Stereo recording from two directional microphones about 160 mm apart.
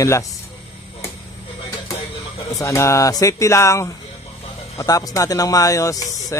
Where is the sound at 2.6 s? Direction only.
20° left (ahead or behind).